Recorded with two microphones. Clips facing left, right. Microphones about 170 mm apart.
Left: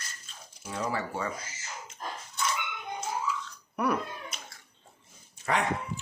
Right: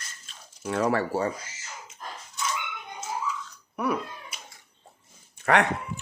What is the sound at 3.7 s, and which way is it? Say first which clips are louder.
Cat: right 1 dB; 5° right (ahead or behind).